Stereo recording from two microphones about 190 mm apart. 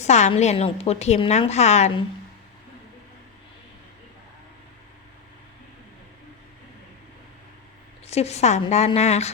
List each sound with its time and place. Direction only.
0.0 s a woman's voice: 35° left (ahead or behind)
8.0 s a woman's voice: 35° left (ahead or behind)